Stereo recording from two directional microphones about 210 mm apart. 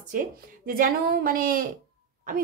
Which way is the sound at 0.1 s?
40° right (ahead or behind).